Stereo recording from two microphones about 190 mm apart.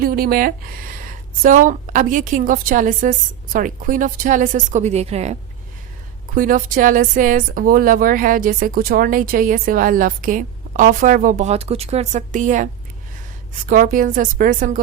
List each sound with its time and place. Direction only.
0.0 s speech: 50° right (ahead or behind); by 5.4 s 35° right (ahead or behind)
6.3 s speech: 45° right (ahead or behind)
13.7 s speech: 45° right (ahead or behind)